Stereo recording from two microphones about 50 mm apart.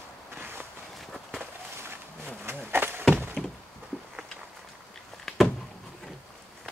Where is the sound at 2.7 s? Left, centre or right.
Right.